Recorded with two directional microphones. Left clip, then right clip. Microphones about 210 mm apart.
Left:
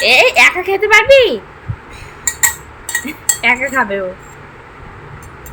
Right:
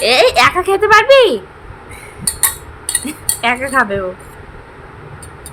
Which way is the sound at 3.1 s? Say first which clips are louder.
Left 2 dB; 10° right (ahead or behind).